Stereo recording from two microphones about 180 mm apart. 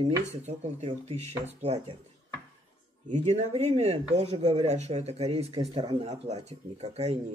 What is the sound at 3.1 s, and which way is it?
Speech, 40° right (ahead or behind).